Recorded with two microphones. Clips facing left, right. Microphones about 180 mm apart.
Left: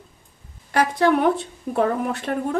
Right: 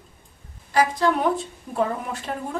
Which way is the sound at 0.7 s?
65° left (ahead or behind).